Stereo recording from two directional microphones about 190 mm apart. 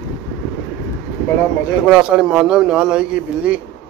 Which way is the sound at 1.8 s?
5° right (ahead or behind).